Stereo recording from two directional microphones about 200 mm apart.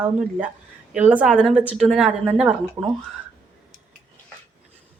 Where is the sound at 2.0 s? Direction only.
30° right (ahead or behind).